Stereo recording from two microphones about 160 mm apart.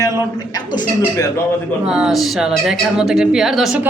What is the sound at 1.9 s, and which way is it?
A woman's voice, 5° right (ahead or behind).